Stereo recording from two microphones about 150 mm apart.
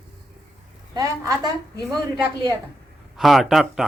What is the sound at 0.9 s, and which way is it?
Speech, 20° right (ahead or behind).